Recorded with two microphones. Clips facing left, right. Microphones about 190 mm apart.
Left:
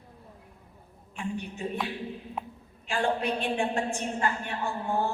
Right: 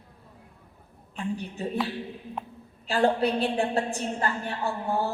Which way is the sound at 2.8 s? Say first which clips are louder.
Right 5 dB; 35° right (ahead or behind).